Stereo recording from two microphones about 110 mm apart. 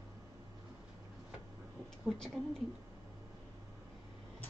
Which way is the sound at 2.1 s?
5° left (ahead or behind).